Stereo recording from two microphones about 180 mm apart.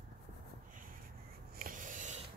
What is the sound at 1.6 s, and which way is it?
Writing, 50° right (ahead or behind).